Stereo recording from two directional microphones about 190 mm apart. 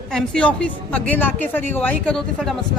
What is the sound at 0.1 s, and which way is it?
A woman's voice, 5° left (ahead or behind).